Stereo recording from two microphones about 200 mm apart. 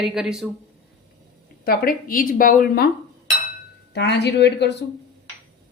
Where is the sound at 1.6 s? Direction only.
50° left (ahead or behind).